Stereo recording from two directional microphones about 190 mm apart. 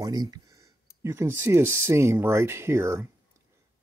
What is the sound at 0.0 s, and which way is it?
Speech, 20° right (ahead or behind).